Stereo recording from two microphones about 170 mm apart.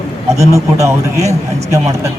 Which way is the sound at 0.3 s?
15° right (ahead or behind).